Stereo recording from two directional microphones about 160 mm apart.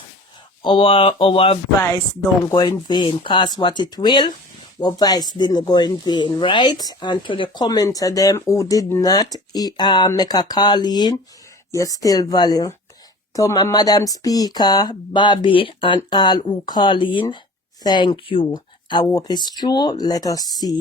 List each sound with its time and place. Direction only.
0.6 s speech: 30° left (ahead or behind)